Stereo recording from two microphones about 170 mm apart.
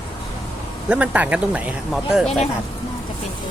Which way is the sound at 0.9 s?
10° right (ahead or behind).